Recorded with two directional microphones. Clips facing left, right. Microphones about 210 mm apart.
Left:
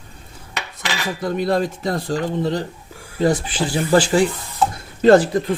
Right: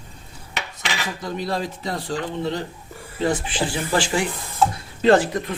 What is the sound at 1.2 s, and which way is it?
Speech, 55° left (ahead or behind).